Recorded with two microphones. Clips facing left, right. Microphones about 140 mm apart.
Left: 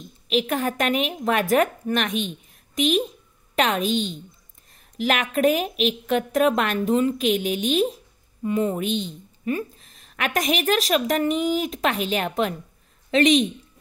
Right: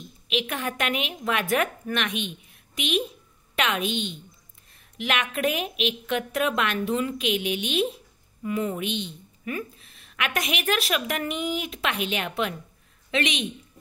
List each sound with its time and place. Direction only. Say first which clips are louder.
0.3 s a woman's voice: left 6 dB; 40° left (ahead or behind)